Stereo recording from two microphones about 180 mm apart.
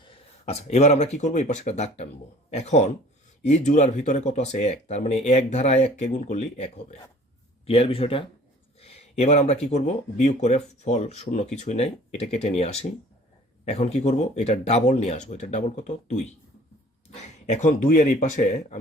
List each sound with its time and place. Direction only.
0.0 s speech: 35° left (ahead or behind)
17.4 s speech: 40° left (ahead or behind)